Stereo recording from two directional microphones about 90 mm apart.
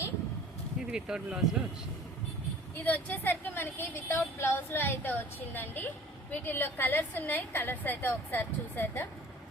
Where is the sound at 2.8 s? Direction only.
20° left (ahead or behind).